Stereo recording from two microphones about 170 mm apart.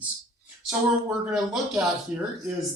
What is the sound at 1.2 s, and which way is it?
A man's voice, 5° right (ahead or behind).